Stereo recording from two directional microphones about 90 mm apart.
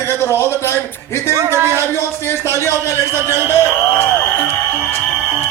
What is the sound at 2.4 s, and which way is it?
Speech, 30° left (ahead or behind).